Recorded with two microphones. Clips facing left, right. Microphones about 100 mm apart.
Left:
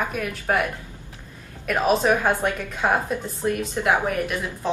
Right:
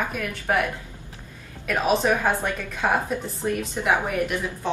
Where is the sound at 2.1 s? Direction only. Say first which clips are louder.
Left 2 dB; 15° left (ahead or behind).